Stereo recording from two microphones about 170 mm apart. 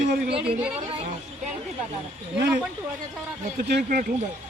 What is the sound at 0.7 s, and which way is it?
Speech, 35° right (ahead or behind).